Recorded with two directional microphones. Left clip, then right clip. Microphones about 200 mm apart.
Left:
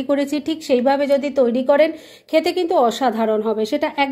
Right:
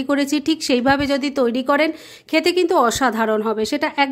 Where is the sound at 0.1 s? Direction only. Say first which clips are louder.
Right 1 dB; 25° right (ahead or behind).